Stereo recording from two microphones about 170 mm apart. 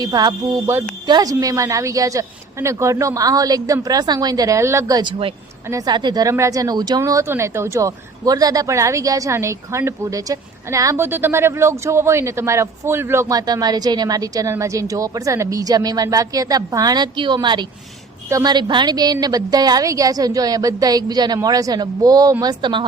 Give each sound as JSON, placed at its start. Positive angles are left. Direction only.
{"t": 0.0, "sound": "speech", "side_deg": -25}